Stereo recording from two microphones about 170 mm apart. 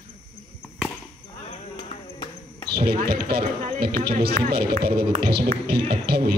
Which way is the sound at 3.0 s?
65° right (ahead or behind).